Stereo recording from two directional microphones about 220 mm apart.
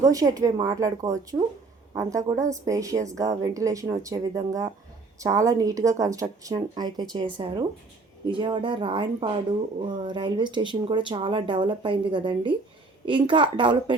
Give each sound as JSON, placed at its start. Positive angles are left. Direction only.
{"t": 0.0, "sound": "a woman's voice", "side_deg": -15}
{"t": 8.3, "sound": "speech", "side_deg": -20}